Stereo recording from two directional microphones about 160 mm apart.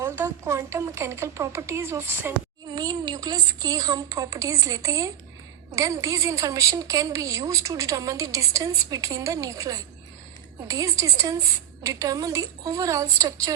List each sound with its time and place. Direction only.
0.0 s a woman's voice: 15° right (ahead or behind)